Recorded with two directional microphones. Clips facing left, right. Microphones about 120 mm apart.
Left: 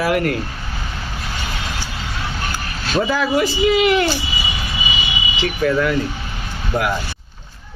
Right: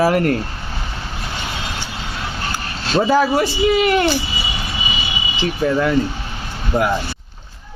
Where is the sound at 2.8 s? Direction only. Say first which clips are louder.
Right 4 dB; 40° right (ahead or behind).